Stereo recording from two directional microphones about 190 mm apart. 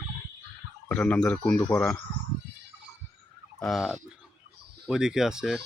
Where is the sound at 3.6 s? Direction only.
Centre (ahead or behind).